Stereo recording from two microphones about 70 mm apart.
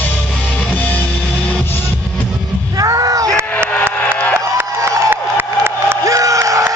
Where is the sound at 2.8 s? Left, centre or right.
Right.